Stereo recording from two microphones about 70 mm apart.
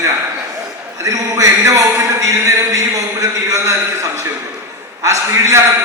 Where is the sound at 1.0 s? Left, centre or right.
Right.